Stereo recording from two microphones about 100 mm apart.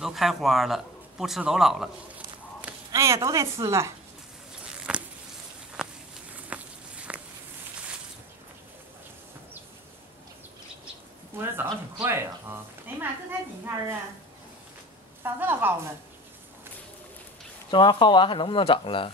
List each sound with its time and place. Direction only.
0.0 s a man's voice: centre (ahead or behind)
2.9 s a woman's voice: 30° right (ahead or behind)
4.6 s a sound: 10° right (ahead or behind)
5.8 s walk: 5° right (ahead or behind)
11.3 s speech: 20° right (ahead or behind)
15.2 s a woman's voice: 20° right (ahead or behind)
17.6 s speech: 55° left (ahead or behind)